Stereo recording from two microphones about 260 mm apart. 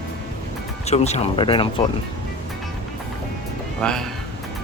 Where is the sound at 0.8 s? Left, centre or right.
Left.